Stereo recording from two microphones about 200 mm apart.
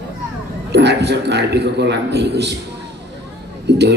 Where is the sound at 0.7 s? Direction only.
55° right (ahead or behind).